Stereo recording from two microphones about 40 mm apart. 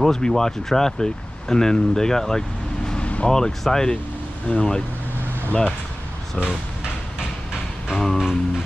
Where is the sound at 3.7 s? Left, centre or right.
Centre.